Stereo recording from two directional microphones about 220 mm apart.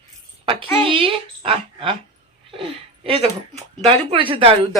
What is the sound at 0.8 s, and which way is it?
Speech, 25° right (ahead or behind).